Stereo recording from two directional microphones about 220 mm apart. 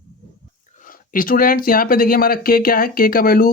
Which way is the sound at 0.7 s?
40° left (ahead or behind).